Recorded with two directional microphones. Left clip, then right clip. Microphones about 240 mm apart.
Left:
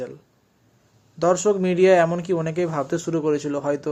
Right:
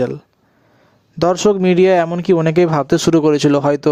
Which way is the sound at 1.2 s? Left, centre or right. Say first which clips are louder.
Right 6 dB; right.